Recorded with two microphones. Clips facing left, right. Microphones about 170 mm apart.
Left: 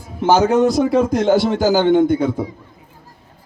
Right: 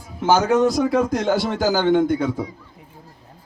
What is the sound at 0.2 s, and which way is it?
A man's voice, 25° left (ahead or behind).